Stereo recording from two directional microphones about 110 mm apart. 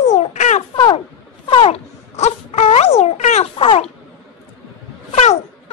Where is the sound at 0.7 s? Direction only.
45° left (ahead or behind).